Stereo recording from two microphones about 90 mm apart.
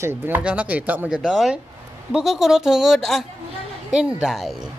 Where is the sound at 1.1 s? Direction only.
5° right (ahead or behind).